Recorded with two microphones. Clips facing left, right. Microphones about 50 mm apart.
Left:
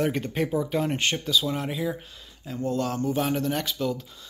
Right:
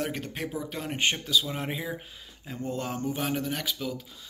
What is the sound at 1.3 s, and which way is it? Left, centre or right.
Speech, centre.